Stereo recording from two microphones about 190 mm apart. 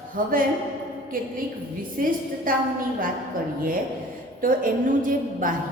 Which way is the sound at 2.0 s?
50° right (ahead or behind).